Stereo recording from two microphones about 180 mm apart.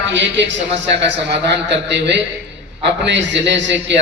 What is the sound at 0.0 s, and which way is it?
Speech, 90° right.